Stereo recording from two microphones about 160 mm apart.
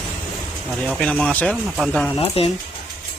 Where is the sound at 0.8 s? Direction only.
5° left (ahead or behind).